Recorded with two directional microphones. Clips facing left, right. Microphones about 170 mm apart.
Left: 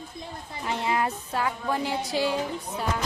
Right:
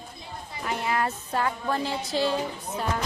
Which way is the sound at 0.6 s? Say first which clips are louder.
Left 1 dB; 25° left (ahead or behind).